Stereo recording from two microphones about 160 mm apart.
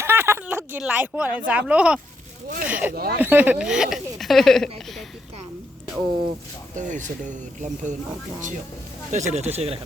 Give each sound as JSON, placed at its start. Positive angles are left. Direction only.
{"t": 0.0, "sound": "a sound", "side_deg": -15}
{"t": 1.5, "sound": "speech", "side_deg": -10}
{"t": 2.9, "sound": "speech", "side_deg": -70}
{"t": 3.2, "sound": "speech", "side_deg": -10}
{"t": 6.7, "sound": "speech", "side_deg": -50}
{"t": 9.1, "sound": "speech", "side_deg": -45}